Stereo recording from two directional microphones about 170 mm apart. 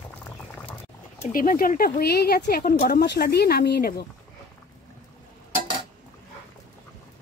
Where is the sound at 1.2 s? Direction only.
50° left (ahead or behind).